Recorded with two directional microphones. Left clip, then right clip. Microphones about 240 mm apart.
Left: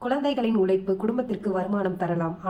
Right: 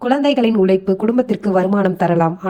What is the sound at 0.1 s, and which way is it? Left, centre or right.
Speech, right.